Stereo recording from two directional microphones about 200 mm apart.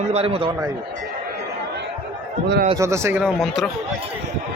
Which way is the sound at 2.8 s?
15° right (ahead or behind).